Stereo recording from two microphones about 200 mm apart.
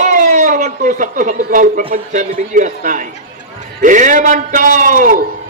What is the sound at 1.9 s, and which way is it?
A man's voice, 40° right (ahead or behind).